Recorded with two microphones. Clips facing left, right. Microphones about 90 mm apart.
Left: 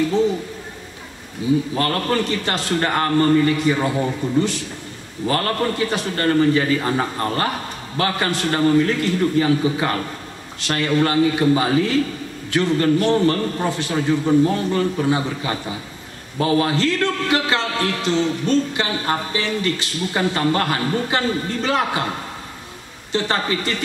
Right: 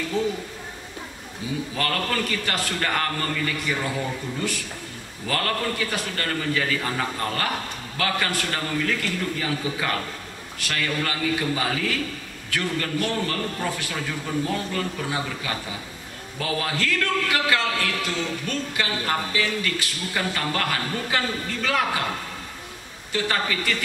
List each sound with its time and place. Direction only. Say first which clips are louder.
1.8 s a man's voice: left 5 dB; 30° left (ahead or behind)
23.1 s a man's voice: left 4 dB; 30° left (ahead or behind)